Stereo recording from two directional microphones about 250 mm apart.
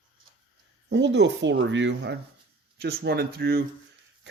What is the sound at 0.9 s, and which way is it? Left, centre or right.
Speech, right.